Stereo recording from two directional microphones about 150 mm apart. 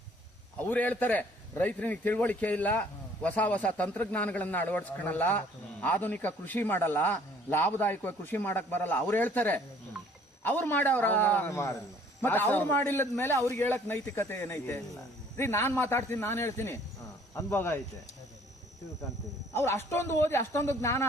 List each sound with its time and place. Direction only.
0.6 s a man's voice: 10° left (ahead or behind)
19.5 s a man's voice: 15° left (ahead or behind)